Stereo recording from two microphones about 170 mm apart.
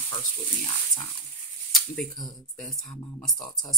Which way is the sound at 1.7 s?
Centre (ahead or behind).